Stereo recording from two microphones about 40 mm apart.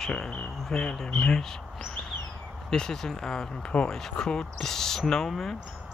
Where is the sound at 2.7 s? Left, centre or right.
Centre.